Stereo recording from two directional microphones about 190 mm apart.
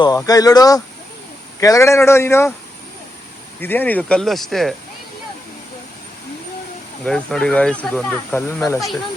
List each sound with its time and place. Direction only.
0.0 s speech: 20° left (ahead or behind)
3.6 s speech: 10° left (ahead or behind)
7.0 s speech: 5° left (ahead or behind)